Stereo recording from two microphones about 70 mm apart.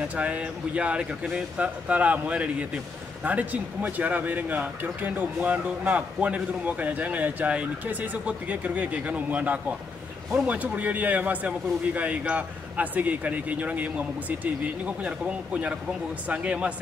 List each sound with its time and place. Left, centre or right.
0.1 s speech: centre